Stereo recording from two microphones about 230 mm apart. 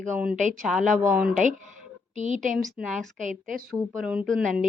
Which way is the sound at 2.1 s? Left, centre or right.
Right.